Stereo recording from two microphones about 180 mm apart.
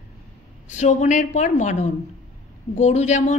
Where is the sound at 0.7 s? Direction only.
40° left (ahead or behind).